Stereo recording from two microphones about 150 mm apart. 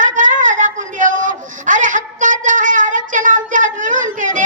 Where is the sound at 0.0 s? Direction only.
60° right (ahead or behind).